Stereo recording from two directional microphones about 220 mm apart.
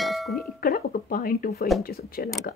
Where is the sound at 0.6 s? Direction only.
40° left (ahead or behind).